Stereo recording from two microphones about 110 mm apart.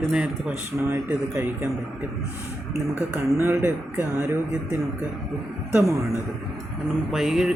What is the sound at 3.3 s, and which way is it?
Speech, 15° right (ahead or behind).